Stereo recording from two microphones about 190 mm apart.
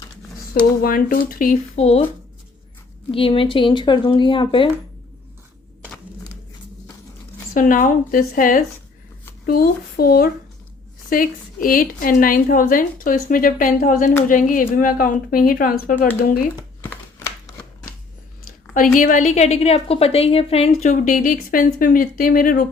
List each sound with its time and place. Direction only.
0.8 s a woman's voice: 50° left (ahead or behind); by 2.0 s 35° left (ahead or behind)
3.1 s speech: 30° left (ahead or behind)
7.5 s a woman's voice: 45° left (ahead or behind)
17.2 s shuffling cards: 15° left (ahead or behind)
18.7 s a woman's voice: 45° left (ahead or behind)
20.8 s a woman's voice: 40° left (ahead or behind)